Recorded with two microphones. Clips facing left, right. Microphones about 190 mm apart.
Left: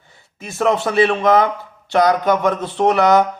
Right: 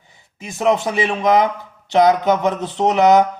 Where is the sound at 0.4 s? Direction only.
15° right (ahead or behind).